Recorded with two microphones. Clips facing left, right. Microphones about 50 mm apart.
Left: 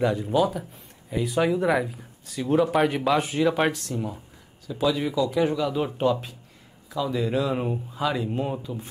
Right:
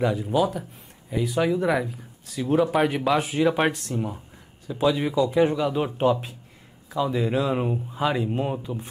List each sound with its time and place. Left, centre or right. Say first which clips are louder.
0.0 s speech: even; centre
6.9 s speech: right 2 dB; centre